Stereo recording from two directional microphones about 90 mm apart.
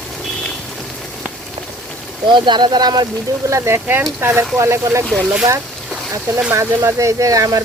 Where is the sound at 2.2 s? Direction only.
60° right (ahead or behind).